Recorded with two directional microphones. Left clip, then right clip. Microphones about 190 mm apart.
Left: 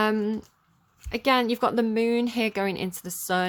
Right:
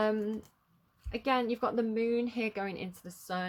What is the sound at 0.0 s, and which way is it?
A woman's voice, 35° left (ahead or behind).